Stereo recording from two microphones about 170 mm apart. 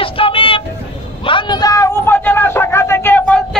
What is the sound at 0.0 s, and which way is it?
Vehicle, 30° left (ahead or behind).